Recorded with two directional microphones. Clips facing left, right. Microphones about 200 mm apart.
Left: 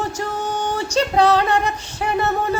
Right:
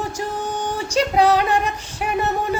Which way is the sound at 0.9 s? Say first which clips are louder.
Even; 10° right (ahead or behind).